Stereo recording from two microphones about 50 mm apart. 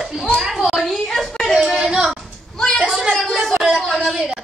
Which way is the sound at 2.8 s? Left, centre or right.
Centre.